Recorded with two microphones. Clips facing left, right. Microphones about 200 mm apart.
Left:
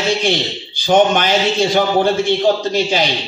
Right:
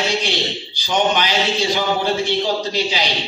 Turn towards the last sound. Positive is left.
turn(degrees=50)  # may be behind; listen again after turning